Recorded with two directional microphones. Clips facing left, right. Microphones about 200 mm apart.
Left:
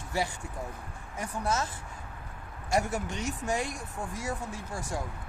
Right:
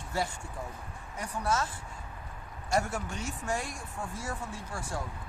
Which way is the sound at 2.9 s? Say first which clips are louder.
Left 3 dB; 20° left (ahead or behind).